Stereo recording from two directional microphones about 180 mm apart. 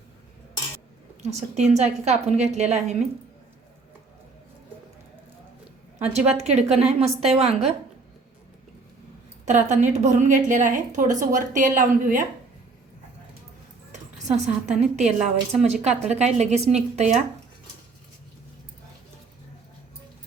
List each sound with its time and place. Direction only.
1.2 s a woman's voice: 35° right (ahead or behind)
6.0 s a woman's voice: 35° right (ahead or behind)
9.5 s a woman's voice: 40° right (ahead or behind)
14.4 s a woman's voice: 40° right (ahead or behind)